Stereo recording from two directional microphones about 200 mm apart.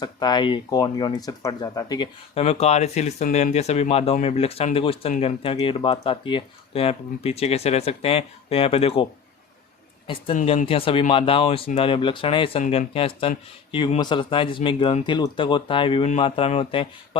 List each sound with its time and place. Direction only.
0.0 s speech: 20° left (ahead or behind)
10.3 s speech: 35° left (ahead or behind)